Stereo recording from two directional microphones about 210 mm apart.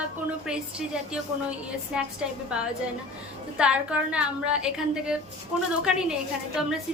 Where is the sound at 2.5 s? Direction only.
5° right (ahead or behind).